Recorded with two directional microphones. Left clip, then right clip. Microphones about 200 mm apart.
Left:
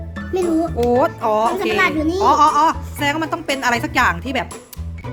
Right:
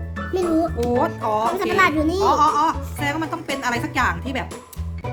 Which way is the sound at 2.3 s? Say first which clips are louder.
Left 5 dB; 25° left (ahead or behind).